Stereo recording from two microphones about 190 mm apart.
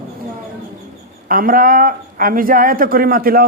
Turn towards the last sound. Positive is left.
turn(degrees=-50)  # may be behind; listen again after turning